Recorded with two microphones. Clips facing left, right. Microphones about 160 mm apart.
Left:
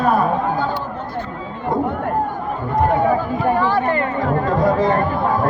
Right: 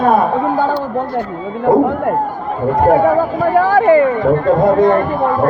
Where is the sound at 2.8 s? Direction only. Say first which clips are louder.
Right 5 dB; 45° right (ahead or behind).